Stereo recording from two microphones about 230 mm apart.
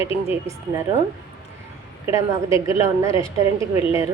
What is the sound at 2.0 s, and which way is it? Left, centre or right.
A woman's voice, centre.